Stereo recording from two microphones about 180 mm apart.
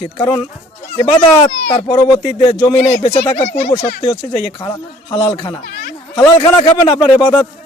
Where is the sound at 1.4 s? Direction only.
25° left (ahead or behind).